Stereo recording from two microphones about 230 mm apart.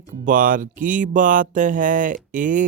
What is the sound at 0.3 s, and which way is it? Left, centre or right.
Speech, right.